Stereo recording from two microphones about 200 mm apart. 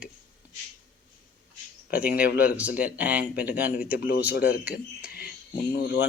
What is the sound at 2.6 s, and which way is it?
Speech, 5° right (ahead or behind).